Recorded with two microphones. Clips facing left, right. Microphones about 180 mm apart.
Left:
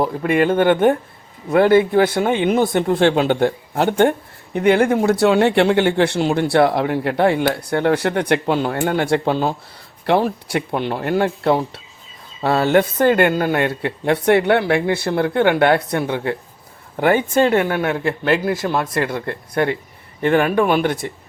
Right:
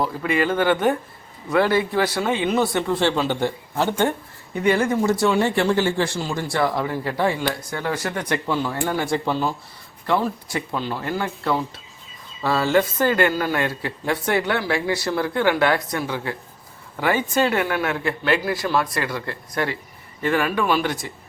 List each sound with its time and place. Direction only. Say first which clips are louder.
0.2 s a man's voice: left 5 dB; 55° left (ahead or behind)
17.8 s a man's voice: left 4 dB; 30° left (ahead or behind)
18.3 s a man's voice: left 3 dB; 45° left (ahead or behind)